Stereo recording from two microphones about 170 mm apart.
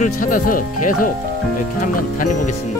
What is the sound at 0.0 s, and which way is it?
Speech, 50° left (ahead or behind).